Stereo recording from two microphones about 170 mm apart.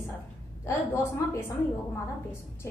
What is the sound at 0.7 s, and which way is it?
Speech, 15° left (ahead or behind).